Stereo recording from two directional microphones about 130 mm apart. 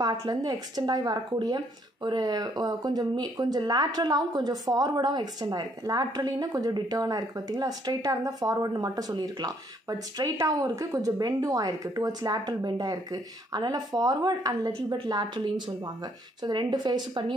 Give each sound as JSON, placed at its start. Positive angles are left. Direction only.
{"t": 0.0, "sound": "speech", "side_deg": -30}